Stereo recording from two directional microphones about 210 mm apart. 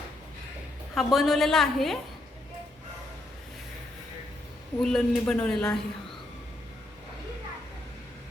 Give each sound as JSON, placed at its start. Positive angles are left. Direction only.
{"t": 0.9, "sound": "a woman's voice", "side_deg": 0}
{"t": 4.8, "sound": "a woman's voice", "side_deg": 0}